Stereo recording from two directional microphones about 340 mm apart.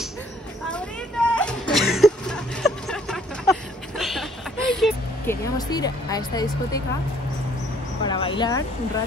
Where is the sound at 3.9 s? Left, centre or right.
Centre.